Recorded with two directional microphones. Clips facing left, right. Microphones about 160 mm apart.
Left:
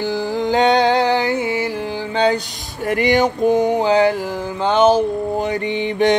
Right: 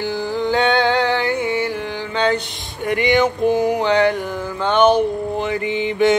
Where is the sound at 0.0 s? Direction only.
45° left (ahead or behind).